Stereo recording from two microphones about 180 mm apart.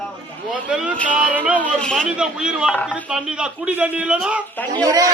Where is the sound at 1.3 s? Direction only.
10° right (ahead or behind).